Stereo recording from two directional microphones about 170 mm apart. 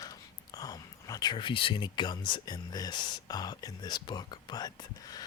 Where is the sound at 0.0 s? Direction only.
20° left (ahead or behind).